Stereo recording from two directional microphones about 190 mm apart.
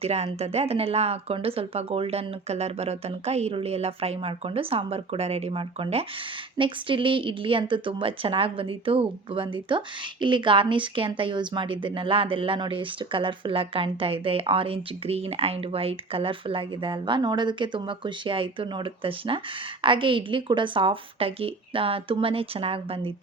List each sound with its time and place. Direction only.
0.0 s a woman's voice: 35° right (ahead or behind)